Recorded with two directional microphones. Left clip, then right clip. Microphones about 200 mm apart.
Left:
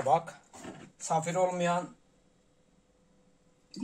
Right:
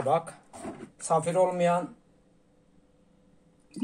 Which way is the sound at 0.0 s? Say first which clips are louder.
Right 1 dB; 5° right (ahead or behind).